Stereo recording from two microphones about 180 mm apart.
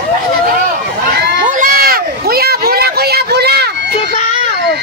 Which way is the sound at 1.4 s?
50° right (ahead or behind).